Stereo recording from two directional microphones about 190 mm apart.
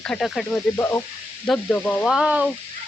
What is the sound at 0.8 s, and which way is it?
Speech, 15° left (ahead or behind).